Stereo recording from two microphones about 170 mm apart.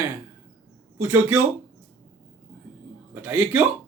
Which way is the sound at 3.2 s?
10° right (ahead or behind).